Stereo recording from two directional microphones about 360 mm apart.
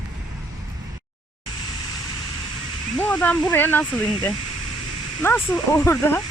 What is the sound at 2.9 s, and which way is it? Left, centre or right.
Speech, centre.